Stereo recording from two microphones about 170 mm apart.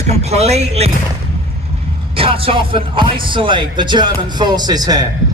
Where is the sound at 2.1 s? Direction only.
30° right (ahead or behind).